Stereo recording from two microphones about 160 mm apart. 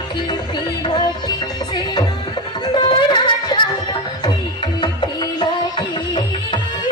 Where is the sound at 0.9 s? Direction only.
25° left (ahead or behind).